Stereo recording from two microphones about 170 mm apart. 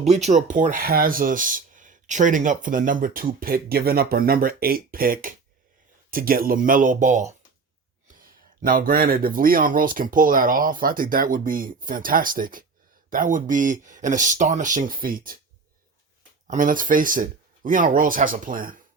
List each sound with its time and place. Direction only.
0.0 s speech: 40° right (ahead or behind); by 15.4 s 55° right (ahead or behind)
16.5 s speech: 50° right (ahead or behind)